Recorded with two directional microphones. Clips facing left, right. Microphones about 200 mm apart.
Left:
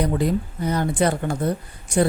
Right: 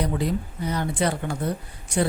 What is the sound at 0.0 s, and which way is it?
Speech, 50° left (ahead or behind).